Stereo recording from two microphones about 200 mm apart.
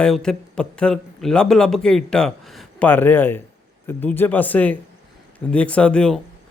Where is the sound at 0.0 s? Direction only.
5° left (ahead or behind).